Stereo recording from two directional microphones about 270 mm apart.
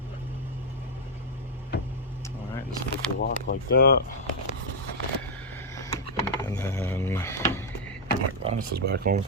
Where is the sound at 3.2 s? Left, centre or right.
Left.